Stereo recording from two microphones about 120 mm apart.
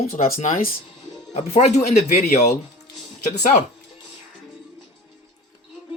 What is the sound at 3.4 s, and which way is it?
Speech, 90° left.